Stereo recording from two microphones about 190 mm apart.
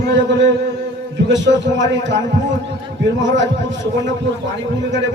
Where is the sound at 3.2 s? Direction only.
70° right (ahead or behind).